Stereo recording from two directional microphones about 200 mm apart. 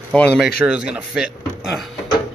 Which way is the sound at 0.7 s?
5° right (ahead or behind).